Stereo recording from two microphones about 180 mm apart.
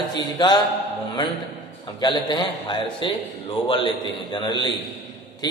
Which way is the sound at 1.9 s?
25° left (ahead or behind).